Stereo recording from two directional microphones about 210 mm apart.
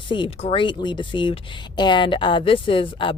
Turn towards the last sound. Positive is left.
turn(degrees=25)  # may be behind; listen again after turning